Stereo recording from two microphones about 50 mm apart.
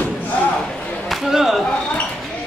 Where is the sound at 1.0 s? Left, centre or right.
Centre.